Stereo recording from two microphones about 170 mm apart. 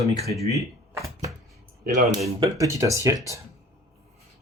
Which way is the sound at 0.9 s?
15° right (ahead or behind).